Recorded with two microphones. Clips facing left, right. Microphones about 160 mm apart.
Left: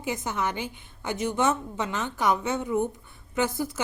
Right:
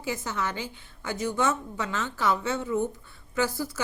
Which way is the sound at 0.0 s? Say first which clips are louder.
Left 2 dB; 20° left (ahead or behind).